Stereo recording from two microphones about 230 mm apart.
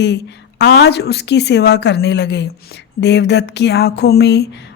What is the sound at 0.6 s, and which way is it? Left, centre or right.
A woman's voice, left.